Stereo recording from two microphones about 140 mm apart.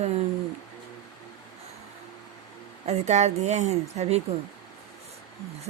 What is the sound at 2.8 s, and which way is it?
A woman's voice, 50° right (ahead or behind).